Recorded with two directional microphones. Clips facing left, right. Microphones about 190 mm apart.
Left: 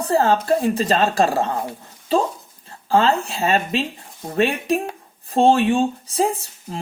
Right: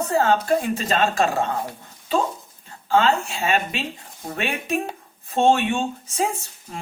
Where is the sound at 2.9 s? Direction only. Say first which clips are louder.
Left 2 dB; 35° left (ahead or behind).